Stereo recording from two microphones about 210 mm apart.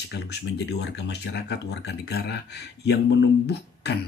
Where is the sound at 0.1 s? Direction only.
55° left (ahead or behind).